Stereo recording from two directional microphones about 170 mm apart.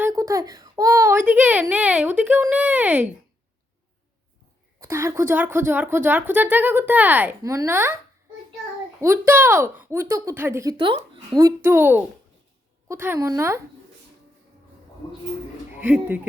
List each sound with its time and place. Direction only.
0.0 s a child's voice: 20° right (ahead or behind)
4.8 s a woman's voice: 15° right (ahead or behind)
9.0 s a woman's voice: 15° right (ahead or behind)
11.3 s a woman's voice: 15° right (ahead or behind)
15.8 s a woman's voice: 10° right (ahead or behind)